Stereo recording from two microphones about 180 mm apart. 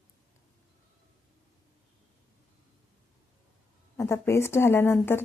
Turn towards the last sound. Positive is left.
turn(degrees=15)  # may be behind; listen again after turning